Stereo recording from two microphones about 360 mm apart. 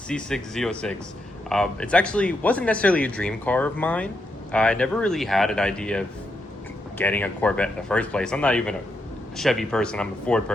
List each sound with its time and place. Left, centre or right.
0.1 s speech: centre